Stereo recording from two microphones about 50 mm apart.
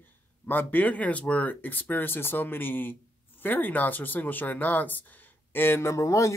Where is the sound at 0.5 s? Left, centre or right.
Left.